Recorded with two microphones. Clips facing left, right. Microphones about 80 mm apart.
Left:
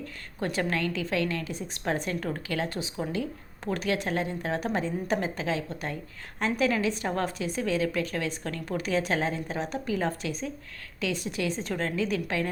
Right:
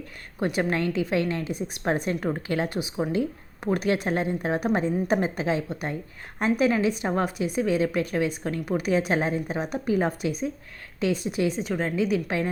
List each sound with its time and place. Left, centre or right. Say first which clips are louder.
0.3 s speech: right 4 dB; centre
11.5 s a woman's voice: right 3 dB; centre